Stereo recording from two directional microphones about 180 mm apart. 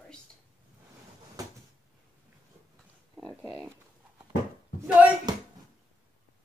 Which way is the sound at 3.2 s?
Centre (ahead or behind).